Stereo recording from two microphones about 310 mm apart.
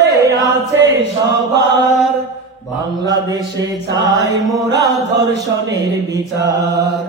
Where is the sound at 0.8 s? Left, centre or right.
Right.